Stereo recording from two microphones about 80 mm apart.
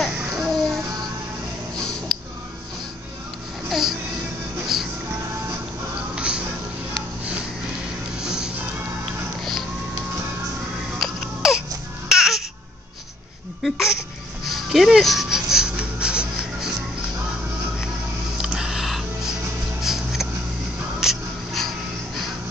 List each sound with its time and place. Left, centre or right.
0.1 s a sound: centre
0.4 s music: centre
1.8 s a sound: centre
3.6 s music: centre
6.1 s music: centre
8.2 s music: centre
11.0 s music: centre
12.1 s baby cry: centre
13.6 s a sound: centre
14.4 s rub: centre
18.4 s music: centre
19.8 s a sound: centre